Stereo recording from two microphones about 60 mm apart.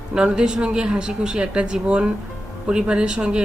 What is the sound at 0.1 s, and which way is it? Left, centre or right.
A woman's voice, centre.